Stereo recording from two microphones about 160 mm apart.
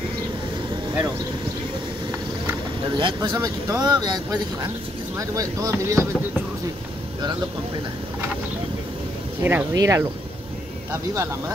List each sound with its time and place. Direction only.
2.9 s speech: 30° right (ahead or behind)
3.3 s speech: 20° right (ahead or behind)
9.4 s speech: 15° right (ahead or behind)